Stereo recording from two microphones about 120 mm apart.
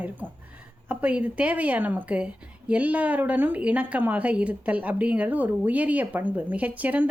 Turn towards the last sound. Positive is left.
turn(degrees=-15)  # may be behind; listen again after turning